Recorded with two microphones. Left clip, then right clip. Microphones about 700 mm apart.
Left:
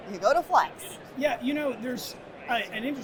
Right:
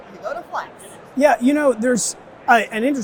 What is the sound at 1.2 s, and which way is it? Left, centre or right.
Speech, right.